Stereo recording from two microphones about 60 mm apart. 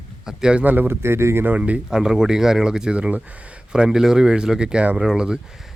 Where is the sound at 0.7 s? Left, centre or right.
Right.